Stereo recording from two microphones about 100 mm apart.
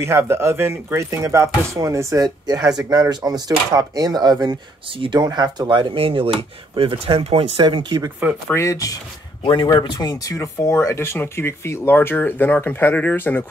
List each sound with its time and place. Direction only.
0.0 s speech: 25° right (ahead or behind); by 4.6 s 45° right (ahead or behind)
4.9 s speech: 60° right (ahead or behind)
5.2 s speech: 40° right (ahead or behind)
8.5 s speech: 35° left (ahead or behind)
9.4 s speech: 55° left (ahead or behind)
9.7 s speech: 40° left (ahead or behind); by 13.5 s 20° left (ahead or behind)